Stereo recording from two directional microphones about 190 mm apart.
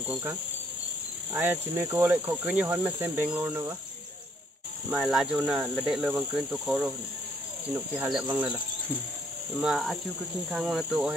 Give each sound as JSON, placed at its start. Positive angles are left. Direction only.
{"t": 0.1, "sound": "speech", "side_deg": -10}
{"t": 4.9, "sound": "speech", "side_deg": -5}
{"t": 8.3, "sound": "cricket", "side_deg": -20}
{"t": 9.6, "sound": "speech", "side_deg": 0}